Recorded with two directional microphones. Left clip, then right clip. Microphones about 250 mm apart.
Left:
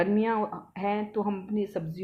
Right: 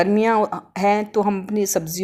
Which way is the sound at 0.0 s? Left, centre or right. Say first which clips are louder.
Right 9 dB; right.